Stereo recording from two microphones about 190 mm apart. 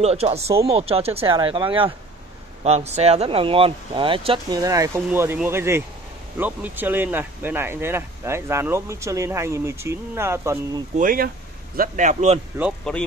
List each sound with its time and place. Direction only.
0.0 s a man's voice: 35° right (ahead or behind); by 10.8 s 15° right (ahead or behind)
11.0 s a man's voice: 45° right (ahead or behind)
12.9 s speech: centre (ahead or behind)